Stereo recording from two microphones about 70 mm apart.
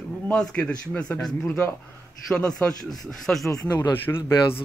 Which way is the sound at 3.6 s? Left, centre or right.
Left.